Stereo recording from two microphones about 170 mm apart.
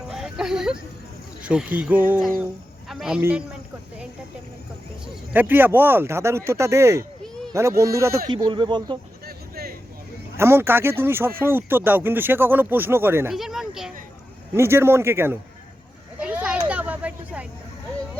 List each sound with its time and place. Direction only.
0.1 s music: 5° right (ahead or behind)
1.4 s speech: 5° right (ahead or behind)
5.3 s speech: 10° right (ahead or behind); by 9.0 s 25° right (ahead or behind)
9.2 s a sound: 65° right (ahead or behind)
10.3 s speech: 15° right (ahead or behind)
13.3 s speech: centre (ahead or behind)
14.5 s speech: 15° right (ahead or behind)
16.2 s children playing: 5° right (ahead or behind)